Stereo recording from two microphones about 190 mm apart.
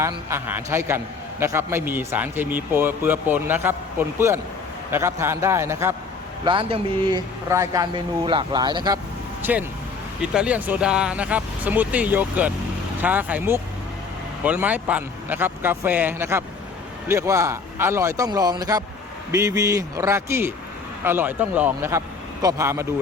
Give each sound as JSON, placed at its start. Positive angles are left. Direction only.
{"t": 0.0, "sound": "a man's voice", "side_deg": -15}
{"t": 6.4, "sound": "speech", "side_deg": -25}
{"t": 9.4, "sound": "a man's voice", "side_deg": -10}